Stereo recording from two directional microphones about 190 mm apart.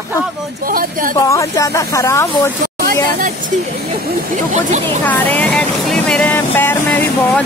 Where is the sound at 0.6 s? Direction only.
45° right (ahead or behind).